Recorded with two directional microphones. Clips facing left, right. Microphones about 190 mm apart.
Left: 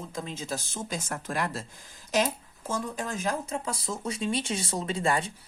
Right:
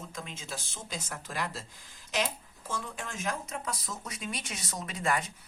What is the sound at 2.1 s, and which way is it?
Speech, 40° left (ahead or behind).